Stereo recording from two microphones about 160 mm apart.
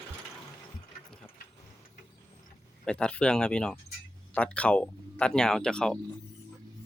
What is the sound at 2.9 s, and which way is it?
Speech, 5° left (ahead or behind).